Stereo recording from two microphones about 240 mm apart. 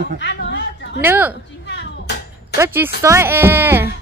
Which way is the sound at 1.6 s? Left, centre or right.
Left.